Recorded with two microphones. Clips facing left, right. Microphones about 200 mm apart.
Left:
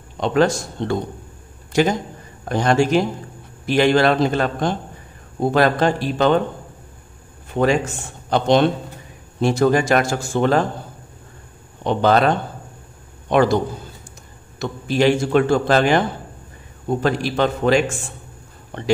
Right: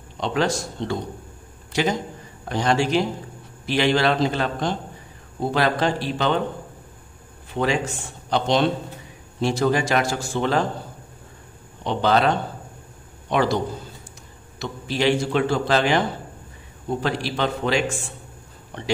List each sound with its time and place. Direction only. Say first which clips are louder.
0.2 s a man's voice: left 6 dB; 50° left (ahead or behind)
7.5 s speech: left 5 dB; 50° left (ahead or behind)
11.8 s speech: left 4 dB; 50° left (ahead or behind)
13.3 s speech: left 5 dB; 50° left (ahead or behind)
14.6 s speech: left 5 dB; 50° left (ahead or behind)
17.0 s speech: left 5 dB; 50° left (ahead or behind)